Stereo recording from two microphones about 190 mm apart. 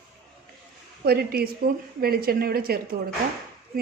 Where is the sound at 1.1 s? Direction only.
55° right (ahead or behind).